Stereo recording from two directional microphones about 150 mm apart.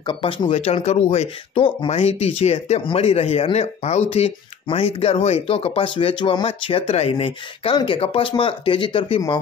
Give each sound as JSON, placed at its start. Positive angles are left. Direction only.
{"t": 0.0, "sound": "speech", "side_deg": 35}